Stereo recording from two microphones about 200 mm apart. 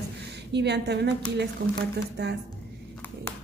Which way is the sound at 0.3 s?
60° right (ahead or behind).